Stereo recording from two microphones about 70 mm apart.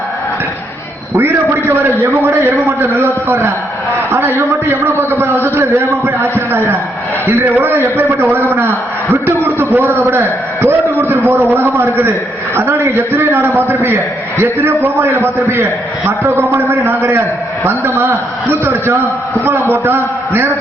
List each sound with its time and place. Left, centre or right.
1.1 s a man's voice: right